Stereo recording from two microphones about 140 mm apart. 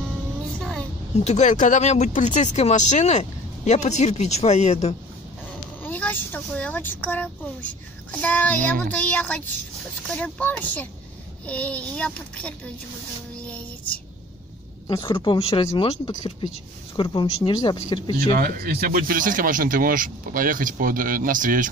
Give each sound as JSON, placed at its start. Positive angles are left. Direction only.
{"t": 0.6, "sound": "a sound", "side_deg": 5}
{"t": 1.2, "sound": "speech", "side_deg": 55}
{"t": 5.9, "sound": "a child's voice", "side_deg": 15}
{"t": 13.4, "sound": "music", "side_deg": 10}
{"t": 15.1, "sound": "speech", "side_deg": 40}
{"t": 18.3, "sound": "speech", "side_deg": -90}